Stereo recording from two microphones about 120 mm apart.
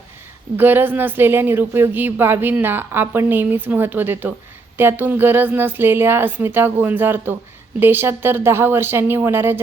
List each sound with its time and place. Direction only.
0.5 s a woman's voice: 15° right (ahead or behind)